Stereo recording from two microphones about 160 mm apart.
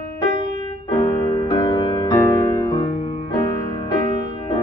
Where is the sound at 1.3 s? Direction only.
30° left (ahead or behind).